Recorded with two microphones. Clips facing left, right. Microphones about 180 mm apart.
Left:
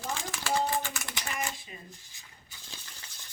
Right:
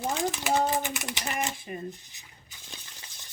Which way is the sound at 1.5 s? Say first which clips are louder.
Right 10 dB; 55° right (ahead or behind).